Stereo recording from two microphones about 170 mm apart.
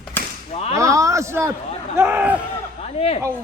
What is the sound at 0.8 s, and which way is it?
A man's voice, 20° right (ahead or behind).